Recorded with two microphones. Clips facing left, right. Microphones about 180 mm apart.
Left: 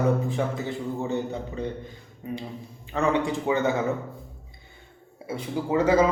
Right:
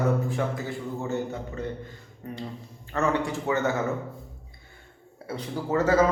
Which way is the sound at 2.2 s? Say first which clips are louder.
Left 2 dB; 15° left (ahead or behind).